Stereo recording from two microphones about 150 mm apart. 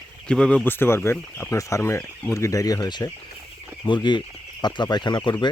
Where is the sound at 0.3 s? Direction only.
5° left (ahead or behind).